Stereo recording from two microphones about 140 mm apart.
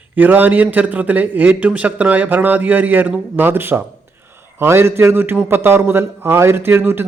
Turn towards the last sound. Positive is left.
turn(degrees=-15)  # may be behind; listen again after turning